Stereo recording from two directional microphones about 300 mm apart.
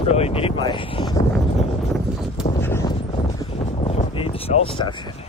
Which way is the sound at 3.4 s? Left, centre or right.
Centre.